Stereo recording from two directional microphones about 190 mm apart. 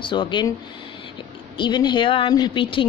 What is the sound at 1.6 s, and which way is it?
Speech, 25° left (ahead or behind).